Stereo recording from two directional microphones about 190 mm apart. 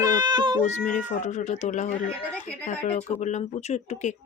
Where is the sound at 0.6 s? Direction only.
40° left (ahead or behind).